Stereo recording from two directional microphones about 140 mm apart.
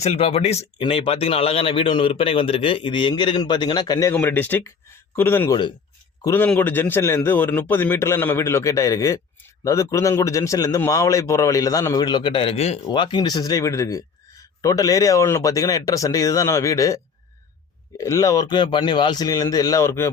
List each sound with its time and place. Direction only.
0.0 s speech: 50° left (ahead or behind)
0.8 s a man's voice: 40° left (ahead or behind)
4.1 s a man's voice: 15° left (ahead or behind)